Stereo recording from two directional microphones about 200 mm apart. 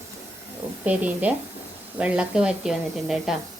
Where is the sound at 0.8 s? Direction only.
5° right (ahead or behind).